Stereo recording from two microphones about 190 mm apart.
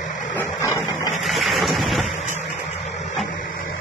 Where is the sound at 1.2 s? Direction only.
Centre (ahead or behind).